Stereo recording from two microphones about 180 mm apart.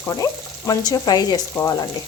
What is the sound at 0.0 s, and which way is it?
Frying, 15° left (ahead or behind).